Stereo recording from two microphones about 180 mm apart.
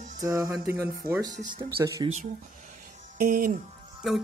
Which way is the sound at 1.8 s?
15° right (ahead or behind).